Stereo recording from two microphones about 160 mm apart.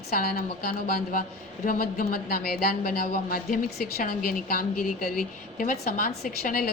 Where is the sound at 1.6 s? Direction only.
60° left (ahead or behind).